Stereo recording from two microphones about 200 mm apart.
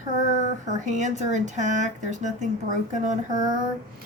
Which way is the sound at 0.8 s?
35° right (ahead or behind).